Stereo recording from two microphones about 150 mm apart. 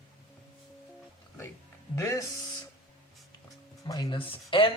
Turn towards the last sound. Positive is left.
turn(degrees=35)  # may be behind; listen again after turning